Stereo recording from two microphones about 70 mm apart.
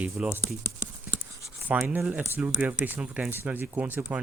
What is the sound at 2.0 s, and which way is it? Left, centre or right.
Speech, centre.